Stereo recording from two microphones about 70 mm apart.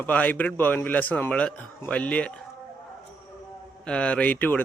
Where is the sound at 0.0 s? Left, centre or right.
Left.